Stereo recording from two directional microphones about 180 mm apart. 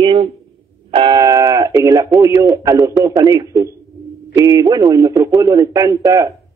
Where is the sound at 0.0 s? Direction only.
30° right (ahead or behind).